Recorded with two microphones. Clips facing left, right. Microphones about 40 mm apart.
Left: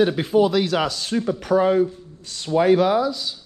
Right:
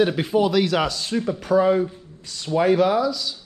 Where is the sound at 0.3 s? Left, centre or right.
Right.